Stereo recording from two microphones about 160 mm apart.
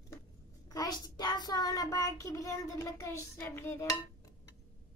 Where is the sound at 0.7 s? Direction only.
25° left (ahead or behind).